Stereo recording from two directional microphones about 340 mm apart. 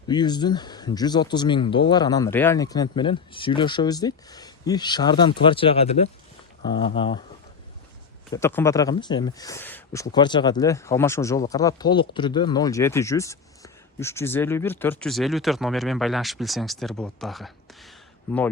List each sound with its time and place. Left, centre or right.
0.1 s speech: centre
8.3 s speech: centre